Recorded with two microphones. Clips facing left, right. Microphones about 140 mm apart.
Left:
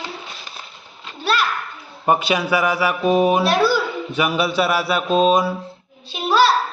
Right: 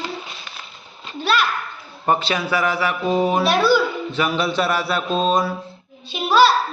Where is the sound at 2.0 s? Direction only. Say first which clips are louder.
Left 2 dB; 10° left (ahead or behind).